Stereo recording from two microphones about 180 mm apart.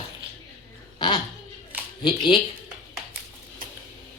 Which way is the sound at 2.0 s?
25° left (ahead or behind).